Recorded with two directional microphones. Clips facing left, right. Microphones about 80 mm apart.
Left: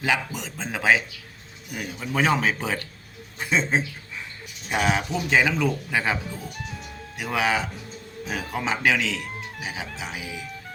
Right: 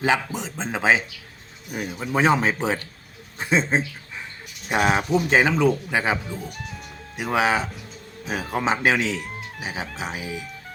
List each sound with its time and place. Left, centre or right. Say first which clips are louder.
0.0 s a man's voice: right 3 dB; right
6.3 s music: right 2 dB; centre
7.2 s a man's voice: right 3 dB; right
9.6 s music: right 3 dB; right
10.0 s a man's voice: right 3 dB; right